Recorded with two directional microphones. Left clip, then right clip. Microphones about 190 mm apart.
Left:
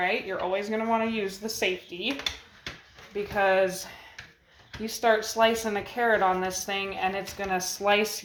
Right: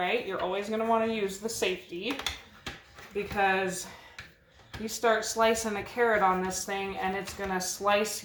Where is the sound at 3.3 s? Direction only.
30° left (ahead or behind).